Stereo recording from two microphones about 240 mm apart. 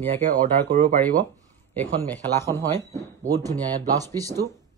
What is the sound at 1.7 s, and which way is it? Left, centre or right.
Speech, centre.